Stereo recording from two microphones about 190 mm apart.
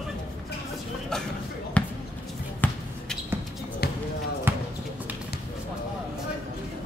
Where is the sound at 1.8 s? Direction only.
5° left (ahead or behind).